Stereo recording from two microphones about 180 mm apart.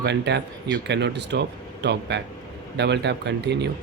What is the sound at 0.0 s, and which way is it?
Speech, 70° right (ahead or behind).